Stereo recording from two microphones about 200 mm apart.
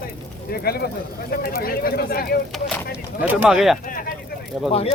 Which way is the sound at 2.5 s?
Centre (ahead or behind).